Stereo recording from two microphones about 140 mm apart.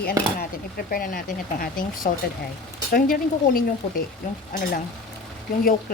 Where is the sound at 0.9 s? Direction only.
90° left.